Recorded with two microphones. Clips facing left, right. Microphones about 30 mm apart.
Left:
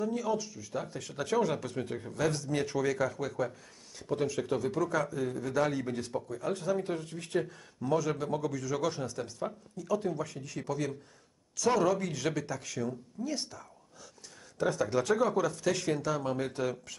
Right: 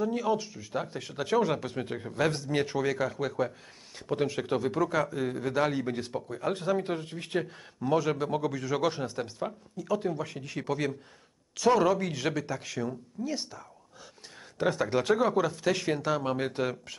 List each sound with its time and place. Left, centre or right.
0.0 s a man's voice: right
14.6 s speech: right